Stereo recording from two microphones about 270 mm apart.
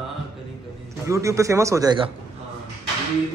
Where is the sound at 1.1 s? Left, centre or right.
Centre.